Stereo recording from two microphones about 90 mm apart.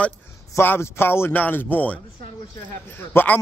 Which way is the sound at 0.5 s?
30° left (ahead or behind).